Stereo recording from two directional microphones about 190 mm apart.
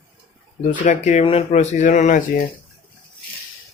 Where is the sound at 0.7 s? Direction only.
40° left (ahead or behind).